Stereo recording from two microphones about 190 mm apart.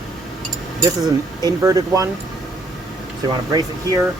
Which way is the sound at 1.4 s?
20° right (ahead or behind).